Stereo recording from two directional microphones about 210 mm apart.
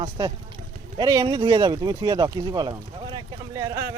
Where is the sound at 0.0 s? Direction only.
20° right (ahead or behind).